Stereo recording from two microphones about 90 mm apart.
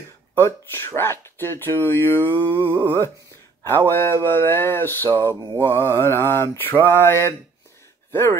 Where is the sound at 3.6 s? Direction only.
25° left (ahead or behind).